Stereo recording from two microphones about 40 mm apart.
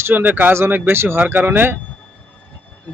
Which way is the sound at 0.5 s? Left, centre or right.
Right.